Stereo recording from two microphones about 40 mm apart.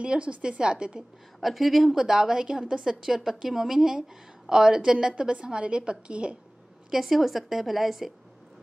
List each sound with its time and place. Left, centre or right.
0.0 s a woman's voice: right
1.4 s a woman's voice: centre
2.0 s a woman's voice: centre
6.9 s a woman's voice: centre